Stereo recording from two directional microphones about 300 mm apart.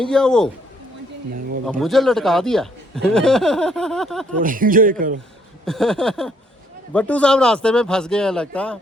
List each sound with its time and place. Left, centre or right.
0.0 s speech: centre
1.8 s speech: centre
4.4 s speech: right
5.6 s speech: centre